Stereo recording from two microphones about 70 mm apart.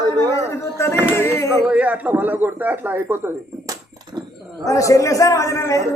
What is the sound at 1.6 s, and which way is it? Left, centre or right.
A man's voice, right.